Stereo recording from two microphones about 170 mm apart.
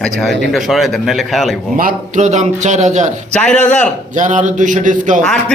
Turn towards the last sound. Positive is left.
turn(degrees=5)  # may be behind; listen again after turning